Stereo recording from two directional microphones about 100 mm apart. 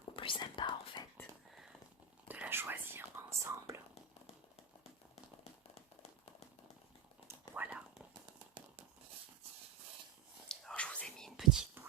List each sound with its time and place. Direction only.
0.2 s whispering: 55° left (ahead or behind)
2.2 s whispering: 15° right (ahead or behind)
5.4 s a sound: 90° left
7.5 s whispering: 15° right (ahead or behind)
10.5 s whispering: 5° left (ahead or behind)
11.3 s whispering: 5° right (ahead or behind)